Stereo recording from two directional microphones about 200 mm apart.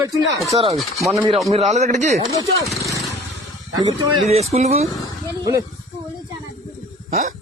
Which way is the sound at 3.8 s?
30° right (ahead or behind).